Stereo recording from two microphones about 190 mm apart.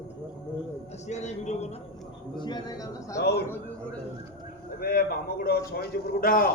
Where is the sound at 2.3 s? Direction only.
25° left (ahead or behind).